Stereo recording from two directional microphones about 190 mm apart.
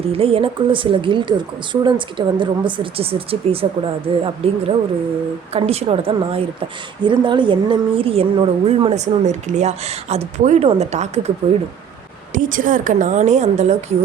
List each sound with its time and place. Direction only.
0.1 s a woman's voice: 30° right (ahead or behind)
12.3 s a woman's voice: 45° right (ahead or behind)